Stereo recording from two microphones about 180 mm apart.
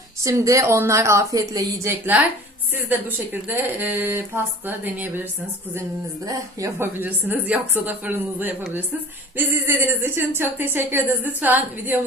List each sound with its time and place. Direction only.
0.2 s a woman's voice: 20° right (ahead or behind)
6.2 s a woman's voice: 20° right (ahead or behind)